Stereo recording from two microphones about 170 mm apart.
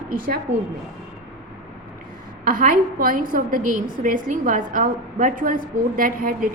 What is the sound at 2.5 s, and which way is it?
A woman's voice, 55° right (ahead or behind).